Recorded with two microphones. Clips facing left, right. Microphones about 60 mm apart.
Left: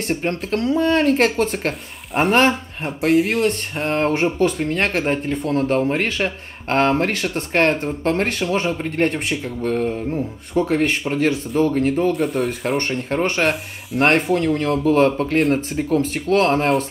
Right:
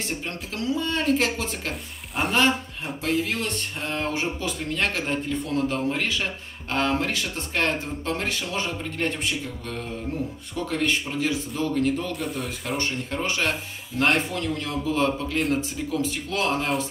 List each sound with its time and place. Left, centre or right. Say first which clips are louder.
0.0 s speech: left 9 dB; left
12.4 s speech: left 8 dB; left